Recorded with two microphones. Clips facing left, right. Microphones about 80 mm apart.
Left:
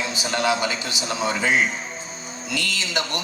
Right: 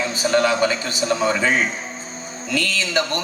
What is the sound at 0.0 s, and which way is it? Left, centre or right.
A man's voice, right.